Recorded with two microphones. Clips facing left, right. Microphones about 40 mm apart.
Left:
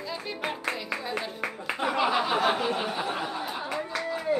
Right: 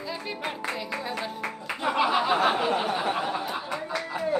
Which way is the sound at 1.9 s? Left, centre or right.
Centre.